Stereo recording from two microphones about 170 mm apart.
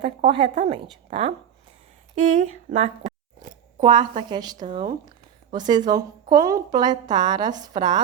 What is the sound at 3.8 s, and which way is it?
A woman's voice, 25° right (ahead or behind).